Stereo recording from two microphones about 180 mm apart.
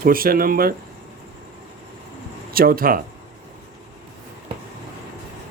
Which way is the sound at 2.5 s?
55° right (ahead or behind).